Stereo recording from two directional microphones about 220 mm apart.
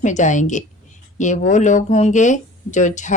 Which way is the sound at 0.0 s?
35° left (ahead or behind).